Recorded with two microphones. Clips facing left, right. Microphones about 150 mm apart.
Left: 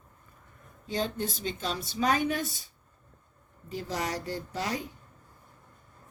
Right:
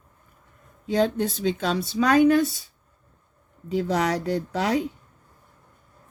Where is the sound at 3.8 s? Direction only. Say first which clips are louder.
Right 9 dB; 75° right (ahead or behind).